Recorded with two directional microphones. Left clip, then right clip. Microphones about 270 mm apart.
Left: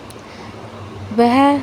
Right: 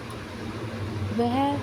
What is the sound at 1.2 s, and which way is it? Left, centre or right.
Speech, left.